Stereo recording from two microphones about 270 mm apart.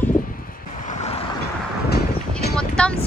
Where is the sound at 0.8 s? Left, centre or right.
Left.